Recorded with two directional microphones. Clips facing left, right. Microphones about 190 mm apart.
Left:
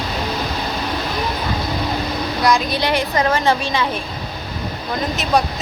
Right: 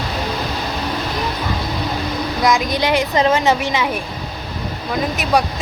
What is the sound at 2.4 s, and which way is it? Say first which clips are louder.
Speech: right 1 dB; 20° right (ahead or behind).